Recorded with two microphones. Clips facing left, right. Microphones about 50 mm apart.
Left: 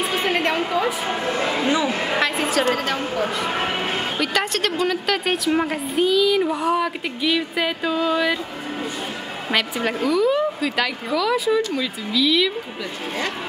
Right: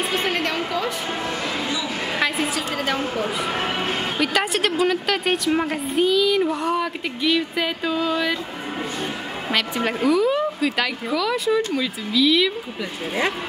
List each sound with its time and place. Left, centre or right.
0.0 s a sound: centre
0.4 s a woman's voice: centre; by 2.0 s left
2.1 s a woman's voice: centre
3.4 s music: centre
4.2 s a woman's voice: centre
9.5 s a woman's voice: centre